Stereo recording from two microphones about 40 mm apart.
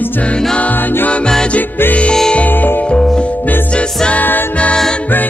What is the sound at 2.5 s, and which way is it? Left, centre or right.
Music, left.